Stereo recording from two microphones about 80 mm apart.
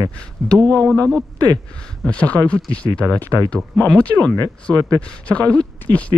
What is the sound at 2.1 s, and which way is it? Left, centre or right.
Speech, centre.